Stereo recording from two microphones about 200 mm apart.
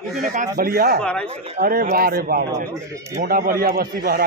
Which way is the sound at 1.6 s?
45° right (ahead or behind).